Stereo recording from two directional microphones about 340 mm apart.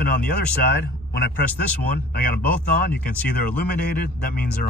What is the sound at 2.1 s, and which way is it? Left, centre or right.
A man's voice, left.